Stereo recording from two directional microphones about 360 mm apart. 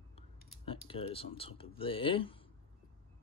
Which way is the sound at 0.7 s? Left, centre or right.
Centre.